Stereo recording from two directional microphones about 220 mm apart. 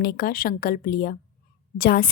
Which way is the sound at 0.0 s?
45° left (ahead or behind).